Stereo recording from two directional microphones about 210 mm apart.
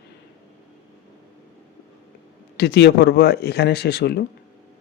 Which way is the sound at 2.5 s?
50° left (ahead or behind).